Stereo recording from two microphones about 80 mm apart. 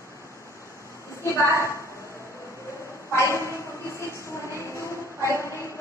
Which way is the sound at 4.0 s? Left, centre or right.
Left.